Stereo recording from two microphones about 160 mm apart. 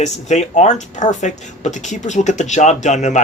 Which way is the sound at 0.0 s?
45° left (ahead or behind).